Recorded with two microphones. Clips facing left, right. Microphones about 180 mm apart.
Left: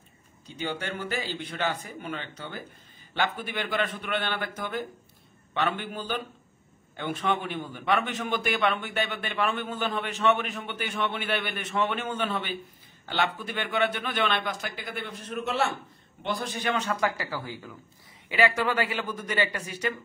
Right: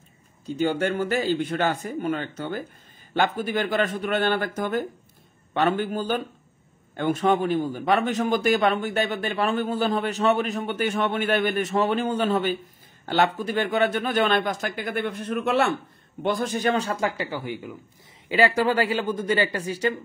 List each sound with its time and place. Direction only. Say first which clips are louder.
0.5 s a man's voice: right 10 dB; 45° right (ahead or behind); by 17.7 s 20° right (ahead or behind)
18.3 s a man's voice: right 4 dB; 35° right (ahead or behind)